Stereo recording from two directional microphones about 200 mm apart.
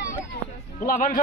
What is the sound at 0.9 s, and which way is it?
Speech, 45° left (ahead or behind).